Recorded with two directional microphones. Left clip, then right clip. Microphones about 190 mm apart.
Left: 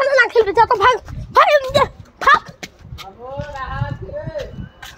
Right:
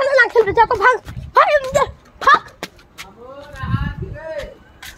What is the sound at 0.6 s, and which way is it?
Speech, 35° left (ahead or behind).